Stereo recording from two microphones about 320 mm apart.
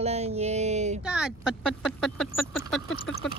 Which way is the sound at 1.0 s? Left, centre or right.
Centre.